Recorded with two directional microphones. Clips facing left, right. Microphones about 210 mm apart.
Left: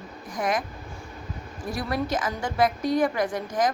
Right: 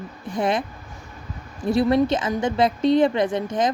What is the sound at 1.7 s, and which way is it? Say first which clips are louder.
A woman's voice: right 9 dB; 25° right (ahead or behind).